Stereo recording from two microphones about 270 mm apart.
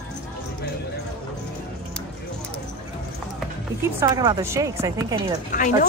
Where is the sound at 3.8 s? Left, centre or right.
Centre.